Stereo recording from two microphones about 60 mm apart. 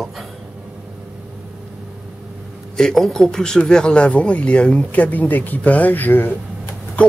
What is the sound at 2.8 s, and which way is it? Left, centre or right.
Speech, centre.